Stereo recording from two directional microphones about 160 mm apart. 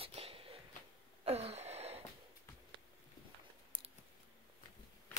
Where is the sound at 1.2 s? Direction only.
40° right (ahead or behind).